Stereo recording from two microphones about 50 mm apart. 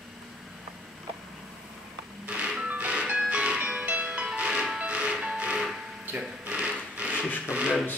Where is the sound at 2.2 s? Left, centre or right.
Right.